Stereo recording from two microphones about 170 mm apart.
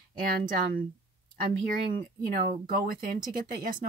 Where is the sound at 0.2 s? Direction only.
60° right (ahead or behind).